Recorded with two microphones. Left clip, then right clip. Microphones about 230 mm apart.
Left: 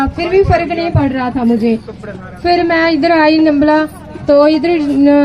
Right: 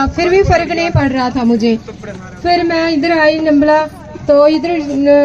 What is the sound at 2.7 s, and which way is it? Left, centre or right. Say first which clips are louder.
A woman's voice: left 2 dB; left.